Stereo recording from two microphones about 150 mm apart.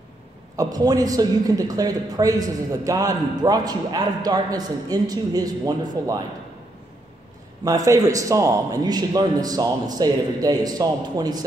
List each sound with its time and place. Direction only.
0.6 s a man's voice: 25° right (ahead or behind)
7.6 s a man's voice: 25° right (ahead or behind)